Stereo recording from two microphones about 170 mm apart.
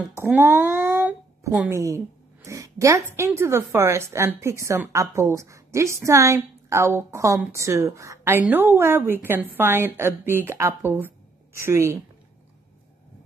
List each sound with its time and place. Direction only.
0.1 s a woman's voice: 10° right (ahead or behind)